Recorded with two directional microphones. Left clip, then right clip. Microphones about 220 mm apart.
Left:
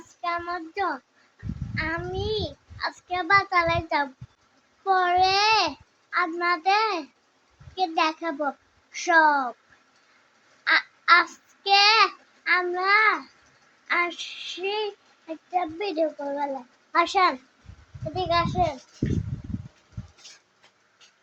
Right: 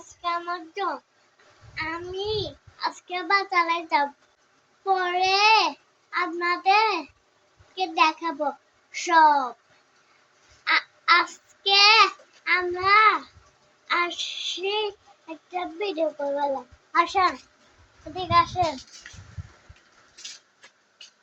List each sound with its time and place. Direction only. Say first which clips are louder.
0.2 s child singing: even; 15° left (ahead or behind)
10.6 s a child's voice: left 1 dB; 10° left (ahead or behind)
13.8 s child singing: even; 10° left (ahead or behind)
16.9 s a child's voice: even; 30° left (ahead or behind)
18.1 s a child's voice: right 3 dB; 25° left (ahead or behind)